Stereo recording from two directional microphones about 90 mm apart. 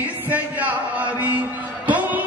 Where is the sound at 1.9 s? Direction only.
15° right (ahead or behind).